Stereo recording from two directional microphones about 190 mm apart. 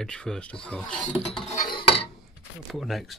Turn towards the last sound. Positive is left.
turn(degrees=0)  # may be behind; listen again after turning